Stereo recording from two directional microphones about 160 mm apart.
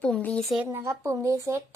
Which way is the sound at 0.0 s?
5° left (ahead or behind).